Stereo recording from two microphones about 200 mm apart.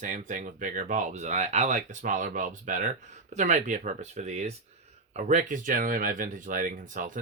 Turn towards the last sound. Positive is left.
turn(degrees=-40)  # may be behind; listen again after turning